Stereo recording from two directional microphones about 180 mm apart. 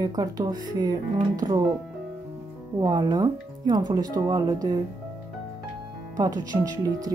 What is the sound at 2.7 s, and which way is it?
Speech, 25° right (ahead or behind).